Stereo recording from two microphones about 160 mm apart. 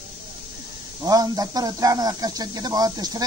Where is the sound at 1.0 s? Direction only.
25° right (ahead or behind).